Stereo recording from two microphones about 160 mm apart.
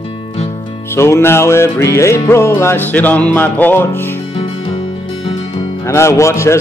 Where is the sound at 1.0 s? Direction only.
15° left (ahead or behind).